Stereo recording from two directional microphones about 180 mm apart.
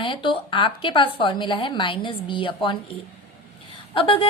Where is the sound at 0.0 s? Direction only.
25° left (ahead or behind).